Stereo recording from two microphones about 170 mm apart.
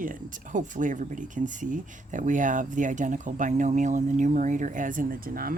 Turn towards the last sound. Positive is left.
turn(degrees=-60)  # may be behind; listen again after turning